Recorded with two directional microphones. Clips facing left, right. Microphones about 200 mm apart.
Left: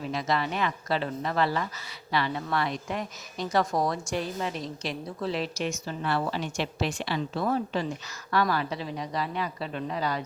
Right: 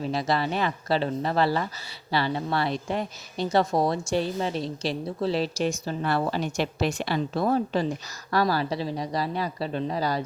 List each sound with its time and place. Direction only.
0.0 s a woman's voice: 35° right (ahead or behind)